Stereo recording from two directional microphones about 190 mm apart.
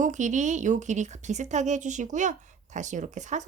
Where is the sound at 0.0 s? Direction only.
40° right (ahead or behind).